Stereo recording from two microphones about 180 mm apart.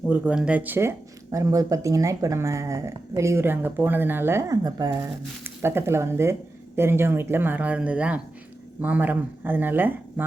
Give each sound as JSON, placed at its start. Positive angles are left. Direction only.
{"t": 0.1, "sound": "speech", "side_deg": -5}